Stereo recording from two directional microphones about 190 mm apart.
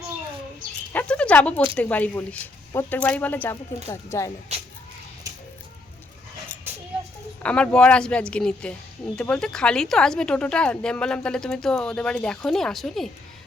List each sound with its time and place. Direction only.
0.9 s a sound: 5° left (ahead or behind)
1.7 s speech: 10° left (ahead or behind)
4.5 s speech: 35° right (ahead or behind)
7.4 s speech: 5° left (ahead or behind)